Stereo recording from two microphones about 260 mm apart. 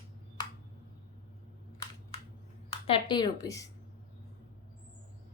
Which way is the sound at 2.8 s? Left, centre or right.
Centre.